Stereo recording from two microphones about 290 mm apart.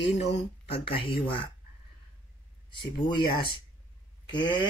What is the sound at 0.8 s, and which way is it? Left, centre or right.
Speech, centre.